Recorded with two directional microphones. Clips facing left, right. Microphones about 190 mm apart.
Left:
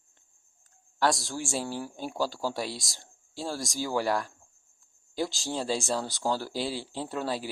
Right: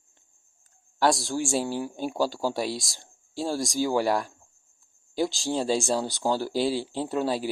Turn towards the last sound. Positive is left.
turn(degrees=-25)  # may be behind; listen again after turning